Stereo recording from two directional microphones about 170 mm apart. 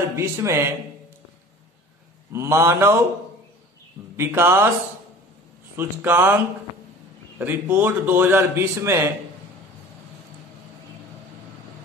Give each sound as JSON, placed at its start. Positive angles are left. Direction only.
{"t": 0.1, "sound": "a man's voice", "side_deg": -15}
{"t": 2.3, "sound": "a man's voice", "side_deg": -15}
{"t": 4.2, "sound": "a man's voice", "side_deg": -15}
{"t": 5.8, "sound": "a man's voice", "side_deg": -10}
{"t": 7.3, "sound": "a man's voice", "side_deg": -10}